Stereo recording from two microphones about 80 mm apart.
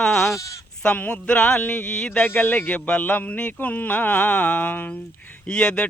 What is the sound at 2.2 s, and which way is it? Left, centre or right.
A man's voice, left.